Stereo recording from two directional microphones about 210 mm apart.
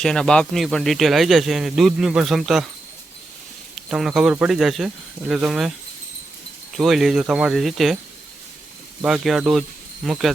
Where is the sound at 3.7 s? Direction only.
Centre (ahead or behind).